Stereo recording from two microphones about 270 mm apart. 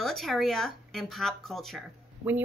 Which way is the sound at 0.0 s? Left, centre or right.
Centre.